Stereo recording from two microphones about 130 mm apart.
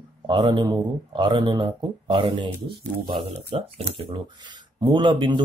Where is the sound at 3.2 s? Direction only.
50° right (ahead or behind).